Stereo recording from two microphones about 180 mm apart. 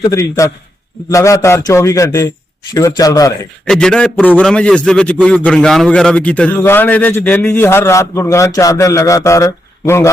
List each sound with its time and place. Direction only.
0.0 s a man's voice: 20° left (ahead or behind)
3.7 s a man's voice: 5° left (ahead or behind)